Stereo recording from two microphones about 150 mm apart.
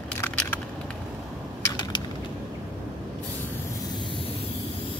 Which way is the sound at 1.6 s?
30° left (ahead or behind).